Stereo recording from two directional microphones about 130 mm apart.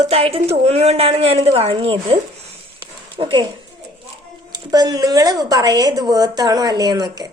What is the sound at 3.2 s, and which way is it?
Speech, 40° right (ahead or behind).